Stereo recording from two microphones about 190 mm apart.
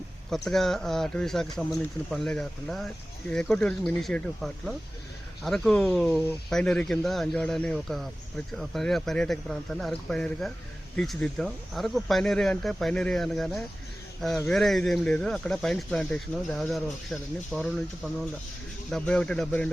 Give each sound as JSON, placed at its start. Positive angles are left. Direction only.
{"t": 0.3, "sound": "speech", "side_deg": 0}